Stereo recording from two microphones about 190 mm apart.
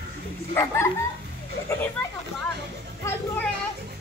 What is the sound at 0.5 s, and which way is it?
Bow-wow, 15° left (ahead or behind).